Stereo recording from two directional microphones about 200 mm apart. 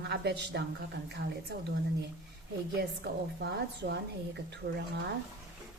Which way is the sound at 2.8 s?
50° right (ahead or behind).